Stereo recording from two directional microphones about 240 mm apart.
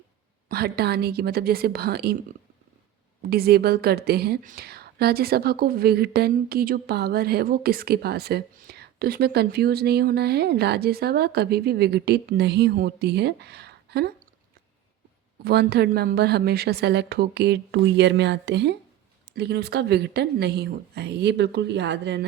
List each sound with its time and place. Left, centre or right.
0.4 s a woman's voice: right
3.2 s a woman's voice: right
15.4 s a woman's voice: right